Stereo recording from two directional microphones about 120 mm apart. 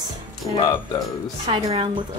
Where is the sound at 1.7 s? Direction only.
50° right (ahead or behind).